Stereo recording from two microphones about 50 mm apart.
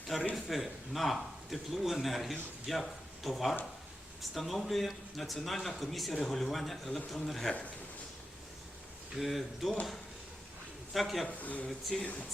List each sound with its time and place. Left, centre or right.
0.1 s a man's voice: centre
9.1 s a man's voice: centre
10.9 s a man's voice: centre
11.3 s speech: left